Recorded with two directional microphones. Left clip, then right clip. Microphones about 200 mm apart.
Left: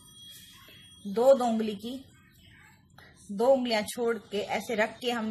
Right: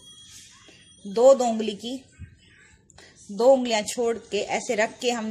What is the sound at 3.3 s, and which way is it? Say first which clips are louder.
A woman's voice: right 5 dB; 35° right (ahead or behind).